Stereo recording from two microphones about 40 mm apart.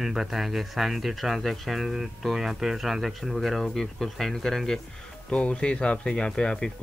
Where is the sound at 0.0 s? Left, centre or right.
Centre.